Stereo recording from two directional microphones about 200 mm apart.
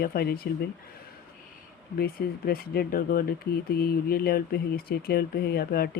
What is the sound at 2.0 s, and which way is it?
Speech, 50° left (ahead or behind).